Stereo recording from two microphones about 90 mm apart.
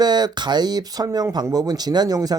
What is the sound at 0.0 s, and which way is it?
Speech, 50° right (ahead or behind).